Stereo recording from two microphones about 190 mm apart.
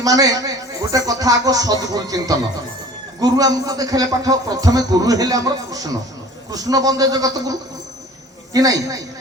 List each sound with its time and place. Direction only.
0.0 s a man's voice: 20° right (ahead or behind)
8.5 s a man's voice: 20° right (ahead or behind)